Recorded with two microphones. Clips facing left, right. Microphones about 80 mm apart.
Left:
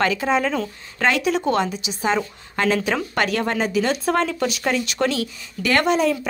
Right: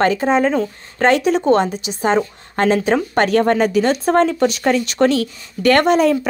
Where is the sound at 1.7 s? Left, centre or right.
Right.